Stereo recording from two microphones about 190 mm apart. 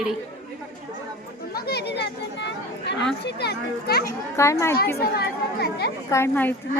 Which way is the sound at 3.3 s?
60° left (ahead or behind).